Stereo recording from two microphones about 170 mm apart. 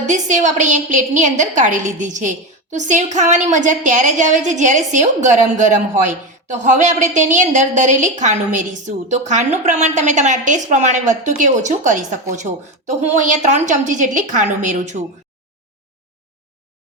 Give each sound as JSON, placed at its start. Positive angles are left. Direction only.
{"t": 0.0, "sound": "a woman's voice", "side_deg": -45}